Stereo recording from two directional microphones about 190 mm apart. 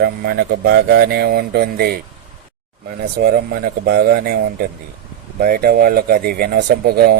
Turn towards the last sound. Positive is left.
turn(degrees=-55)  # may be behind; listen again after turning